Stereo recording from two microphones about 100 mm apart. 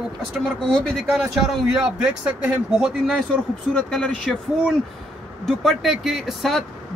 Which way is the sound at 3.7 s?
5° left (ahead or behind).